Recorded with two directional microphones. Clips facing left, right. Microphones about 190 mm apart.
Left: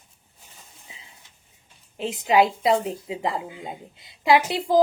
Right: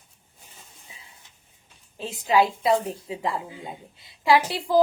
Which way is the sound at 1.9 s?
20° left (ahead or behind).